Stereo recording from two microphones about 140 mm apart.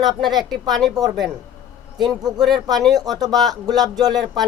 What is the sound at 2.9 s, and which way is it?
Speech, 30° right (ahead or behind).